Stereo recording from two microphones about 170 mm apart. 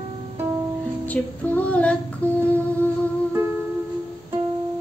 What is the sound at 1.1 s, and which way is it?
Female singing, 10° left (ahead or behind).